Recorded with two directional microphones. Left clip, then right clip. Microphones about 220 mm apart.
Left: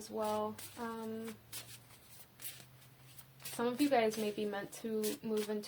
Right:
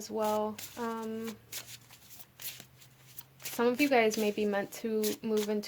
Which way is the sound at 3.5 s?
45° right (ahead or behind).